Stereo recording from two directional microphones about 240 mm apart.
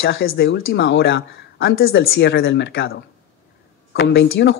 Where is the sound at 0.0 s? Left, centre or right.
Left.